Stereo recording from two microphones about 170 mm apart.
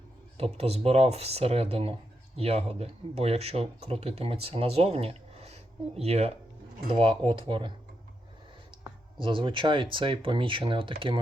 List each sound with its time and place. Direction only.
0.3 s speech: 35° right (ahead or behind)
8.8 s speech: 30° right (ahead or behind)